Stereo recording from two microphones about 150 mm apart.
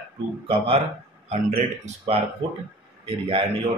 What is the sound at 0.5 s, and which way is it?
Speech, 40° right (ahead or behind).